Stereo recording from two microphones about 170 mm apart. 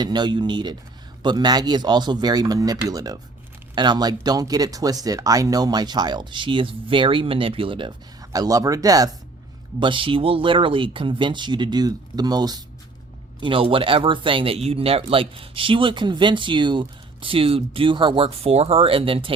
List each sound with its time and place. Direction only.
0.0 s speech: 25° right (ahead or behind)